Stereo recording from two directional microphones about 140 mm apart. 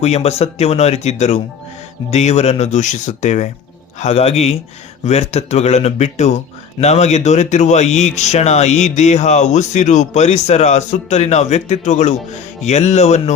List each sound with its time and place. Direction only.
0.0 s speech: 50° left (ahead or behind)
4.0 s speech: 45° left (ahead or behind)